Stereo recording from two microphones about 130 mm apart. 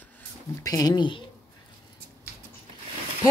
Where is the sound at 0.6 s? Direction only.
30° left (ahead or behind).